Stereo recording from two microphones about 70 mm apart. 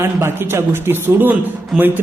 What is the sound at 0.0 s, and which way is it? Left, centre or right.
A man's voice, right.